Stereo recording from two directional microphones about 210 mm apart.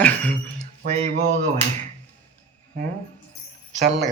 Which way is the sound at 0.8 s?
35° right (ahead or behind).